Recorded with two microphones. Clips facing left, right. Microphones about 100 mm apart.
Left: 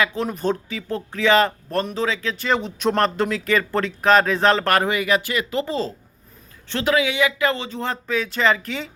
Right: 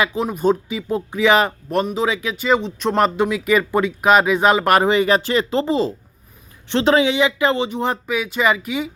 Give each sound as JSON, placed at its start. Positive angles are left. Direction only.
{"t": 0.0, "sound": "speech", "side_deg": -10}
{"t": 2.9, "sound": "speech", "side_deg": -10}
{"t": 5.6, "sound": "speech", "side_deg": -20}